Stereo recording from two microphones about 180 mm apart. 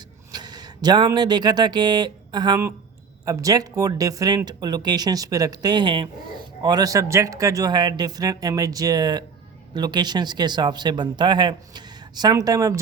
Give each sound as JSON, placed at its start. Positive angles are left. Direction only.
{"t": 0.3, "sound": "speech", "side_deg": -20}